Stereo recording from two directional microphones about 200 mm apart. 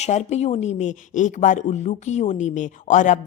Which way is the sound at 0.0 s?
35° left (ahead or behind).